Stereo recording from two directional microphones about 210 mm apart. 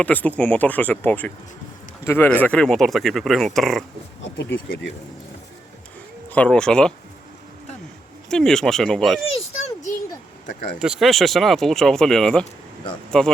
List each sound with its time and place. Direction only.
0.0 s speech: 5° left (ahead or behind)
4.2 s speech: 55° left (ahead or behind)
6.3 s speech: 5° left (ahead or behind)
8.3 s speech: centre (ahead or behind)
10.8 s speech: 5° right (ahead or behind)